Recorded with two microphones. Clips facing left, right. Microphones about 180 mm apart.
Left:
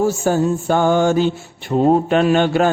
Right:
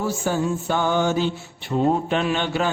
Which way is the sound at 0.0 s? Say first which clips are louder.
Left 7 dB; 45° left (ahead or behind).